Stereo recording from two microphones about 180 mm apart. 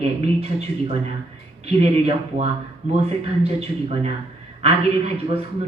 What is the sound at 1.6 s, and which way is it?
Speech, 35° right (ahead or behind).